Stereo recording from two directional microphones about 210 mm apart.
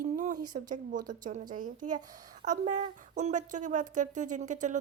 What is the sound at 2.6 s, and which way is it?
Speech, 35° right (ahead or behind).